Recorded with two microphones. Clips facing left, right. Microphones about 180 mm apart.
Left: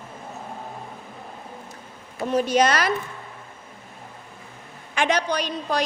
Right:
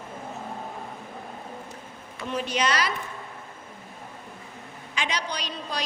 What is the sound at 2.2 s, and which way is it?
Speech, 40° left (ahead or behind).